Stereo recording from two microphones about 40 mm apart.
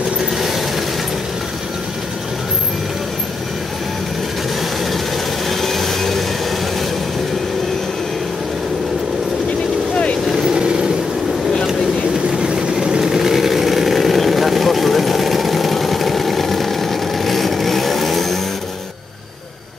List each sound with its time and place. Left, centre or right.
0.4 s mechanisms: centre
5.5 s a sound: centre
10.3 s vehicle: centre
12.3 s vehicle: centre